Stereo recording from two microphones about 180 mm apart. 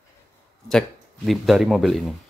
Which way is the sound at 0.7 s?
Centre (ahead or behind).